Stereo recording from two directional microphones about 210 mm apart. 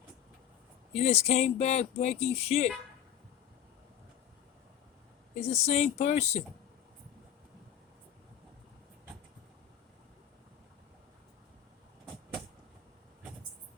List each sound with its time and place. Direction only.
1.0 s speech: 30° left (ahead or behind)
5.4 s speech: 30° left (ahead or behind)